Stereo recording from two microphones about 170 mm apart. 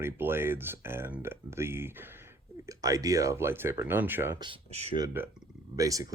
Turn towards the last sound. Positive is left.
turn(degrees=-20)  # may be behind; listen again after turning